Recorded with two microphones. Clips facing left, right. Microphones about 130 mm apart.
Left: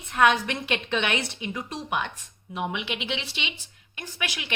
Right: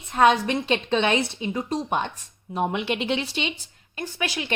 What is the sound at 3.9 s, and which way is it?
Speech, 35° right (ahead or behind).